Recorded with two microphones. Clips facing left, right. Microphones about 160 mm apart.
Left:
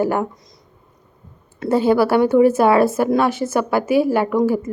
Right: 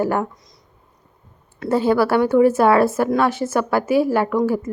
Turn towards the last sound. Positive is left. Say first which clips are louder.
# left 2 dB
turn(degrees=20)  # may be behind; listen again after turning